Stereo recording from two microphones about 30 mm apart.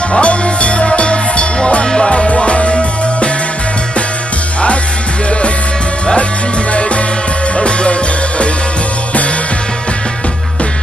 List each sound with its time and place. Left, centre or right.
0.1 s music: left
1.9 s music: left
7.5 s music: left